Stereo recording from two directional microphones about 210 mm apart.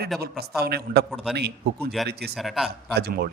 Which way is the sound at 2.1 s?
50° right (ahead or behind).